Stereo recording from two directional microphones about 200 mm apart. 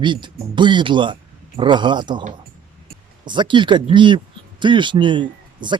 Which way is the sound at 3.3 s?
25° right (ahead or behind).